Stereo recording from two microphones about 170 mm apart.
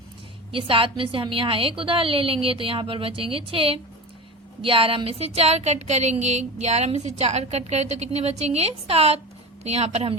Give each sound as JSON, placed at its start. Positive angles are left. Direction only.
{"t": 0.5, "sound": "speech", "side_deg": -30}